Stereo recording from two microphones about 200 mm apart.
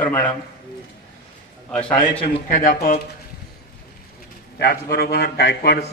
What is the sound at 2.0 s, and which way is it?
A man's voice, 40° left (ahead or behind).